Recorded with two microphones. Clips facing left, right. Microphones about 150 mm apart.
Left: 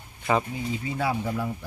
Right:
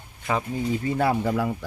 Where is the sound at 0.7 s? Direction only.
50° right (ahead or behind); by 1.5 s 70° right (ahead or behind).